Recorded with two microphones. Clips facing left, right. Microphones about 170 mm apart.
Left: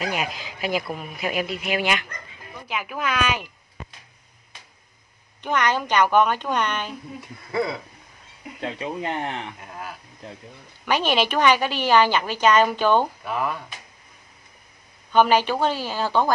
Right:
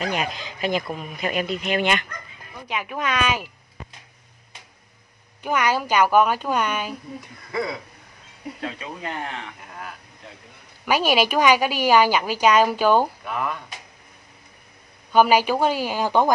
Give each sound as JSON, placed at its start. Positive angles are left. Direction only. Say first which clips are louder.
{"t": 0.0, "sound": "speech", "louder": "right 1 dB", "side_deg": 5}
{"t": 5.4, "sound": "a woman's voice", "louder": "right 1 dB", "side_deg": -10}
{"t": 8.5, "sound": "speech", "louder": "left 5 dB", "side_deg": 25}
{"t": 10.9, "sound": "a woman's voice", "louder": "right 2 dB", "side_deg": -10}
{"t": 13.2, "sound": "speech", "louder": "left 1 dB", "side_deg": 0}
{"t": 15.1, "sound": "a woman's voice", "louder": "right 1 dB", "side_deg": -10}